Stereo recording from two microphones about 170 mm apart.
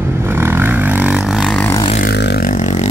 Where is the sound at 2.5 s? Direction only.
45° left (ahead or behind).